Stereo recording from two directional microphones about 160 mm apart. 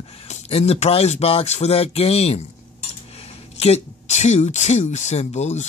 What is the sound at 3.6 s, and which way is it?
Speech, 45° left (ahead or behind).